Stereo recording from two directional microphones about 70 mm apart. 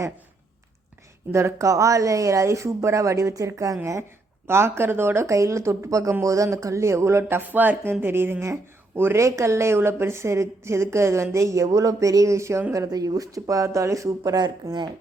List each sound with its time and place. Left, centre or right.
1.3 s a woman's voice: right
4.4 s a woman's voice: right
12.7 s a woman's voice: right
14.3 s speech: right